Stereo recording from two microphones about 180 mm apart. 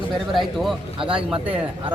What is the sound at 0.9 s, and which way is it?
Speech, 30° right (ahead or behind).